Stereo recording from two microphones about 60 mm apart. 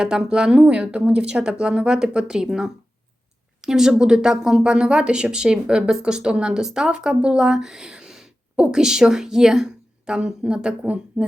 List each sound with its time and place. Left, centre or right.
0.0 s speech: centre